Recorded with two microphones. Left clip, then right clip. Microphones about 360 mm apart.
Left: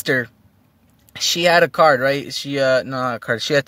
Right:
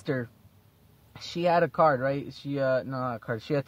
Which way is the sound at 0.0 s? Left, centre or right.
Left.